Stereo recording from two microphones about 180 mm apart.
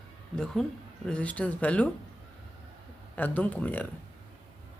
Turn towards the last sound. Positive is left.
turn(degrees=10)  # may be behind; listen again after turning